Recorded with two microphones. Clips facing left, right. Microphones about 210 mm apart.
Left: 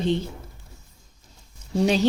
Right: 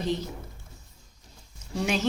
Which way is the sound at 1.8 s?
35° left (ahead or behind).